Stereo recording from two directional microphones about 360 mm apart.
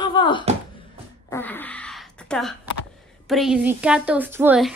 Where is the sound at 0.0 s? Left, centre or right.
Centre.